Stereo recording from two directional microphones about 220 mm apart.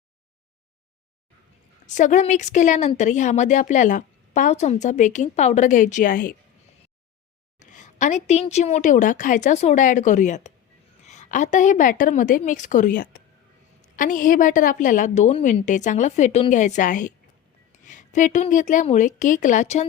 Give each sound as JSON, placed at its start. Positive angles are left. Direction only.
{"t": 1.9, "sound": "a woman's voice", "side_deg": 35}
{"t": 7.6, "sound": "a woman's voice", "side_deg": 35}